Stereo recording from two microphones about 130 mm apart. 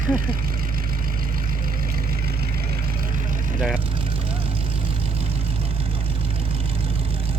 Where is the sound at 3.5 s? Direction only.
Centre (ahead or behind).